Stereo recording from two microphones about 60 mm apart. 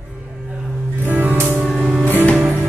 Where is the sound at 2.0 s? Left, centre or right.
Left.